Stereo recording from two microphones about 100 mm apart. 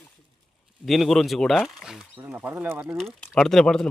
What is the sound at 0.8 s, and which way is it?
Speech, centre (ahead or behind).